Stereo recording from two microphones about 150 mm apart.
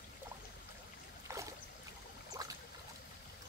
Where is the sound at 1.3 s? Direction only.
15° right (ahead or behind).